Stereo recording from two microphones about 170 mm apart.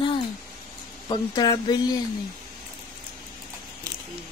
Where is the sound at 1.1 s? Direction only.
25° left (ahead or behind).